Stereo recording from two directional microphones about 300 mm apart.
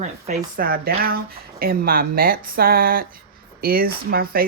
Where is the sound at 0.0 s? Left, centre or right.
Right.